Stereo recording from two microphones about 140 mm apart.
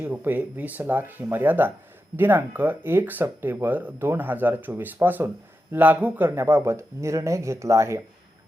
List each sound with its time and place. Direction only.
0.0 s speech: 15° right (ahead or behind)